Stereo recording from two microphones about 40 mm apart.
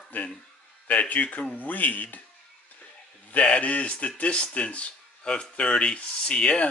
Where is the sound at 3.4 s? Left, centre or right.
Left.